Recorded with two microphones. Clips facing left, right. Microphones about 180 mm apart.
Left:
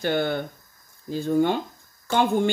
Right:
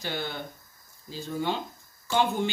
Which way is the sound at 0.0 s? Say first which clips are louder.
Left 10 dB; 55° left (ahead or behind).